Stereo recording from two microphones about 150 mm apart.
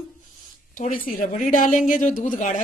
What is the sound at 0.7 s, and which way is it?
Speech, 65° left (ahead or behind).